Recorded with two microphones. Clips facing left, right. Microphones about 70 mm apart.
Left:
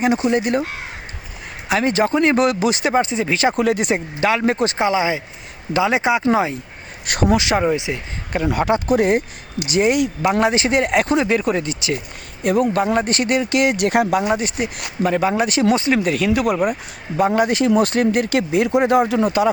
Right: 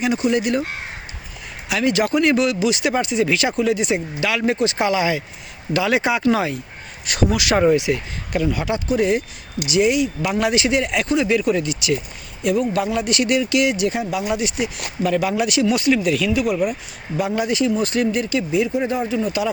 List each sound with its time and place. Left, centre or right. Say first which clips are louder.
0.0 s speech: left 2 dB; left
1.7 s speech: left 1 dB; left
2.4 s speech: left 2 dB; left
3.6 s speech: left 1 dB; left
4.8 s speech: left 1 dB; left
7.1 s speech: left 2 dB; left
7.5 s speech: right 2 dB; centre
7.8 s speech: right 4 dB; left
8.4 s speech: left 7 dB; left
10.4 s speech: right 1 dB; left